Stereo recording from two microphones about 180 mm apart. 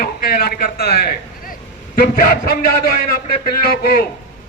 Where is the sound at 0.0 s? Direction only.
55° left (ahead or behind).